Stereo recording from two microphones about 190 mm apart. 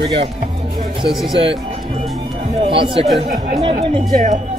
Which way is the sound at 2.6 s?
25° right (ahead or behind).